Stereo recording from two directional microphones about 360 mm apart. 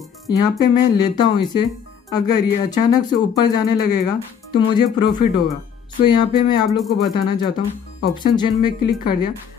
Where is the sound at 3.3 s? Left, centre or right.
Left.